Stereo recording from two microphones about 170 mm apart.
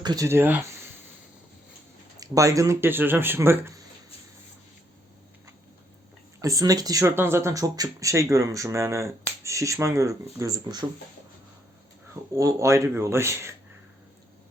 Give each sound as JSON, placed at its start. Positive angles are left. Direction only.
{"t": 0.0, "sound": "speech", "side_deg": -20}
{"t": 2.1, "sound": "speech", "side_deg": -20}
{"t": 6.4, "sound": "speech", "side_deg": -20}
{"t": 12.3, "sound": "speech", "side_deg": -20}